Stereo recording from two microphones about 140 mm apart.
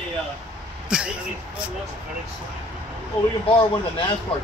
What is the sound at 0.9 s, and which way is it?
Speech, 5° right (ahead or behind).